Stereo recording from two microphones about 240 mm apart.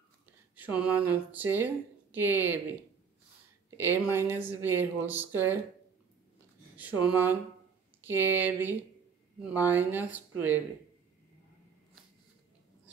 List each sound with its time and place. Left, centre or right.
0.6 s speech: centre
3.7 s speech: centre
6.8 s speech: centre